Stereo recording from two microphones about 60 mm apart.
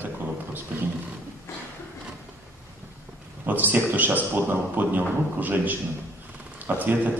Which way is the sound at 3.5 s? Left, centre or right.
Right.